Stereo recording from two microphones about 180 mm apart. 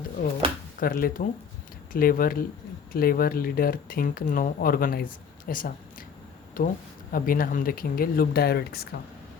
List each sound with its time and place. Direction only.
0.8 s speech: 50° left (ahead or behind)
5.5 s a sound: 50° left (ahead or behind)
6.6 s speech: 50° left (ahead or behind)